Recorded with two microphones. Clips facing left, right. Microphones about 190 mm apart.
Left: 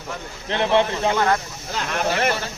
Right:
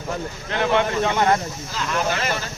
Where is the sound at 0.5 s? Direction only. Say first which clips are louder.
Left 2 dB; 30° left (ahead or behind).